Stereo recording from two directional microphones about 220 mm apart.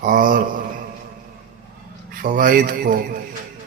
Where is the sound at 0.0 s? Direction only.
40° right (ahead or behind).